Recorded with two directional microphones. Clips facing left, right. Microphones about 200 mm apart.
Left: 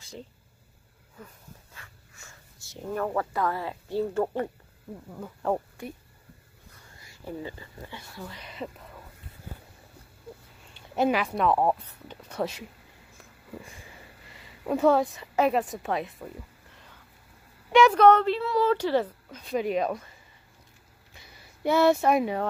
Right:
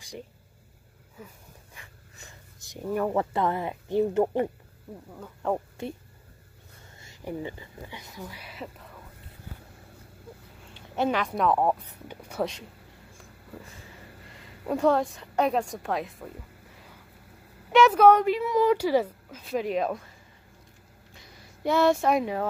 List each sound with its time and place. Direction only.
1.1 s dog: 10° right (ahead or behind)
2.2 s a woman's voice: 15° right (ahead or behind)
5.1 s speech: centre (ahead or behind)
5.8 s speech: 25° right (ahead or behind)
7.0 s speech: 20° right (ahead or behind)
11.0 s speech: 10° left (ahead or behind)
12.1 s a sound: 10° right (ahead or behind)
14.7 s speech: centre (ahead or behind)
17.7 s a woman's voice: 5° right (ahead or behind)
21.6 s speech: 5° left (ahead or behind)